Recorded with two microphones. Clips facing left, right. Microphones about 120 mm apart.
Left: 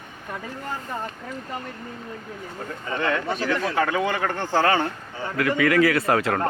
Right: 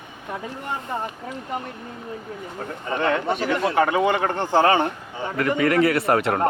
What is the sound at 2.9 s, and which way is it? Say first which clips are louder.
Speech: right 3 dB; 20° right (ahead or behind).